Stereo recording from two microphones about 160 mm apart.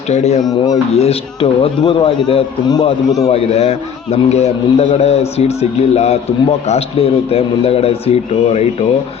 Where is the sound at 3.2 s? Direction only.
40° left (ahead or behind).